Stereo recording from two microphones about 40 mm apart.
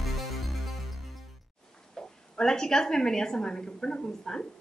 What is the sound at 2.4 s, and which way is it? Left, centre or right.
A woman's voice, centre.